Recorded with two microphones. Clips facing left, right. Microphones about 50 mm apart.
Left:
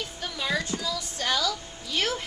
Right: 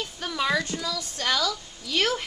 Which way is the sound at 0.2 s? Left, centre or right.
Right.